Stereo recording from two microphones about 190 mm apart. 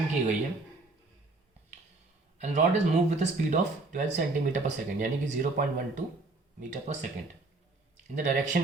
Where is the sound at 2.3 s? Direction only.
40° right (ahead or behind).